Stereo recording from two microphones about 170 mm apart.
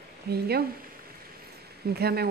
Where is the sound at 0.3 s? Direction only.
70° right (ahead or behind).